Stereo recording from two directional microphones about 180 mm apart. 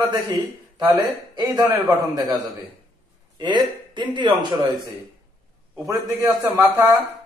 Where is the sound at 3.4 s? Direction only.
25° right (ahead or behind).